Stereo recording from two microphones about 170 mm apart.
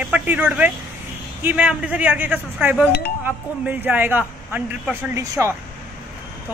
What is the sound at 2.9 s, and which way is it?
Speech, 65° left (ahead or behind).